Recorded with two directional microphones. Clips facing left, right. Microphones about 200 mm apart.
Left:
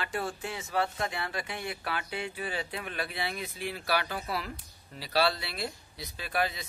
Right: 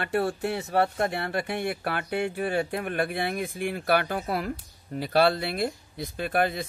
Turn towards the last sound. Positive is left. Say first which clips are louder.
# right 6 dB
turn(degrees=-55)  # may be behind; listen again after turning